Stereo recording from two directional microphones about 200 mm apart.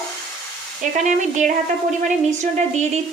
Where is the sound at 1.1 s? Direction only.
40° right (ahead or behind).